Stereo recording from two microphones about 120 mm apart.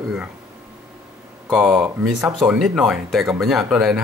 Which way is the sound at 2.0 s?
5° right (ahead or behind).